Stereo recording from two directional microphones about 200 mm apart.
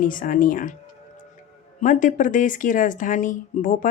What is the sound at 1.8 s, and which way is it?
Speech, 40° left (ahead or behind).